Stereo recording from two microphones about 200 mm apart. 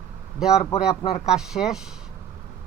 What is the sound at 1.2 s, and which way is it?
Speech, 5° right (ahead or behind).